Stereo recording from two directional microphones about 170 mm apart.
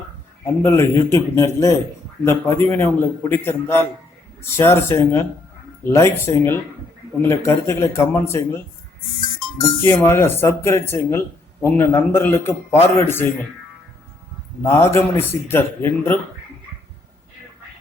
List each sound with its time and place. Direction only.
0.4 s speech: 15° left (ahead or behind)
14.6 s speech: 15° left (ahead or behind)